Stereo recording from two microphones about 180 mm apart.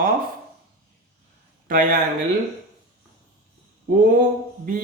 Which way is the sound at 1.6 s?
50° right (ahead or behind).